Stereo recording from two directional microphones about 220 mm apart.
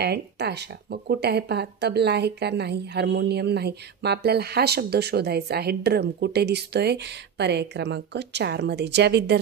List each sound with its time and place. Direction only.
0.0 s speech: 50° right (ahead or behind)